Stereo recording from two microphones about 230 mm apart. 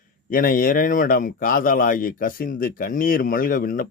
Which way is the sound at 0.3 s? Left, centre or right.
Left.